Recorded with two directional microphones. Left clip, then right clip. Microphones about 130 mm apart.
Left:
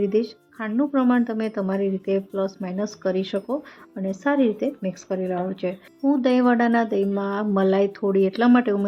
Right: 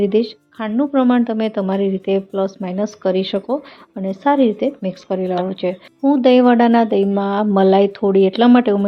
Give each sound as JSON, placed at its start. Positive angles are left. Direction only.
{"t": 0.0, "sound": "speech", "side_deg": -20}